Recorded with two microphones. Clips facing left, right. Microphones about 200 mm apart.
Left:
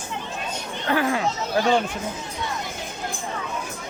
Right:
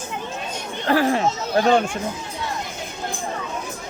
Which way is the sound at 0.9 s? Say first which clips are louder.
Right 4 dB; 30° right (ahead or behind).